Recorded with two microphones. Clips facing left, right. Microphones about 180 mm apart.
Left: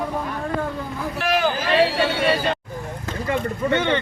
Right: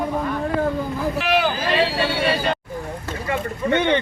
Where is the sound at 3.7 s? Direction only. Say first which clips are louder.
Right 3 dB; 15° right (ahead or behind).